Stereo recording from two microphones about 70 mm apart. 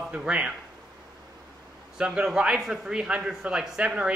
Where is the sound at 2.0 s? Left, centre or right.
Centre.